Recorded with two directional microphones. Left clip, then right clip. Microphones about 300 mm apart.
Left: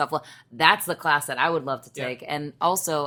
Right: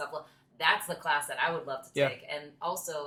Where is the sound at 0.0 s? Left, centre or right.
Left.